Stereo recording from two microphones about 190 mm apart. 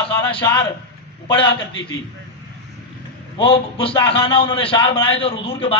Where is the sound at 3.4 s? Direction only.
25° left (ahead or behind).